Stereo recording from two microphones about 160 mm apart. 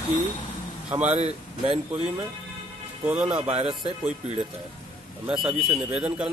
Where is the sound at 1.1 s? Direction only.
40° right (ahead or behind).